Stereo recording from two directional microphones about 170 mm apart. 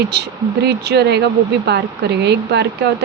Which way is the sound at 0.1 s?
75° right (ahead or behind).